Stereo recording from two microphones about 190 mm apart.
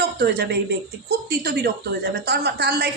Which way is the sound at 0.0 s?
60° right (ahead or behind).